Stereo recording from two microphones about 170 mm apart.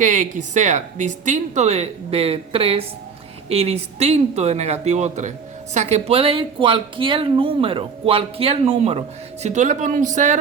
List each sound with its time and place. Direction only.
0.0 s speech: 45° right (ahead or behind)